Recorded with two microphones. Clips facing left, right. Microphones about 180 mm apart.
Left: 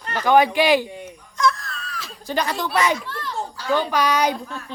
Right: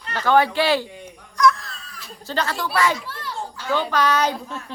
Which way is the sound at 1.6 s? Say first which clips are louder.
Left 6 dB; 65° left (ahead or behind).